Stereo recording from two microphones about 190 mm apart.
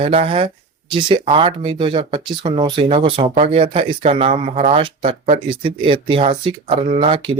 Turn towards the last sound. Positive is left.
turn(degrees=-25)  # may be behind; listen again after turning